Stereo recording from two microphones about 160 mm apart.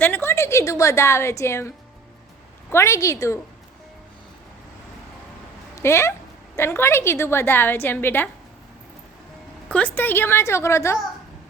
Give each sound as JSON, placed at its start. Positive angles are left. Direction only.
{"t": 0.0, "sound": "a woman's voice", "side_deg": 15}
{"t": 5.7, "sound": "a woman's voice", "side_deg": 15}
{"t": 9.6, "sound": "a woman's voice", "side_deg": 10}